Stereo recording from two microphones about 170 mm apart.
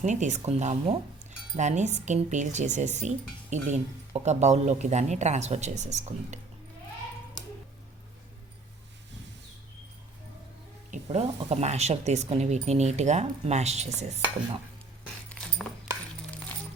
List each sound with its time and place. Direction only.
0.0 s speech: 45° right (ahead or behind)
10.9 s speech: 40° right (ahead or behind)